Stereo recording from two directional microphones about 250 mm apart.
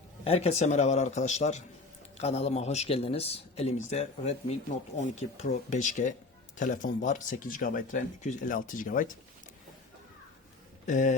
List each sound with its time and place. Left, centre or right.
0.3 s speech: left
10.8 s speech: left